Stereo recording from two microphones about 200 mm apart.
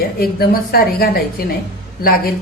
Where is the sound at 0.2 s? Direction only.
50° left (ahead or behind).